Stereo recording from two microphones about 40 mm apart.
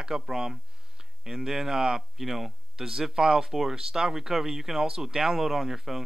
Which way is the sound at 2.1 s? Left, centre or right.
Centre.